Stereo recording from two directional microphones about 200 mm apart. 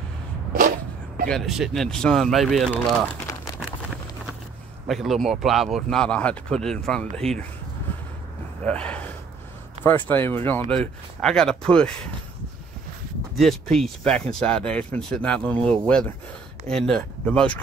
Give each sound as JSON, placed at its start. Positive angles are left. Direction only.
{"t": 1.3, "sound": "speech", "side_deg": 0}
{"t": 3.3, "sound": "crumpling", "side_deg": 15}
{"t": 4.8, "sound": "speech", "side_deg": 0}
{"t": 8.6, "sound": "speech", "side_deg": 5}
{"t": 10.0, "sound": "speech", "side_deg": 10}
{"t": 13.4, "sound": "speech", "side_deg": 0}